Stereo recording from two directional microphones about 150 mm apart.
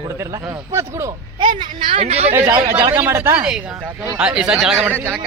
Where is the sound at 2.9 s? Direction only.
15° right (ahead or behind).